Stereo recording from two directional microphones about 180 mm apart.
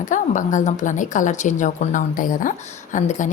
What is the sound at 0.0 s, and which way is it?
A woman's voice, 45° left (ahead or behind).